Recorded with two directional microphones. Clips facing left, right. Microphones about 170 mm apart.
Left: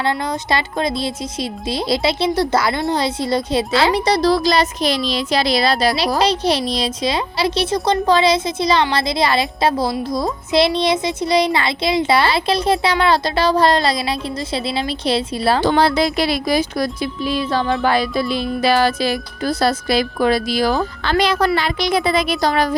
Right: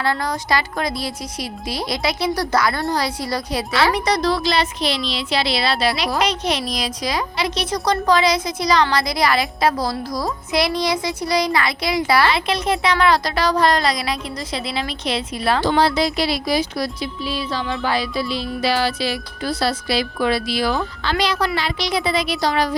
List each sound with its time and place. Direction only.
0.0 s speech: 25° left (ahead or behind)
15.6 s speech: 55° left (ahead or behind)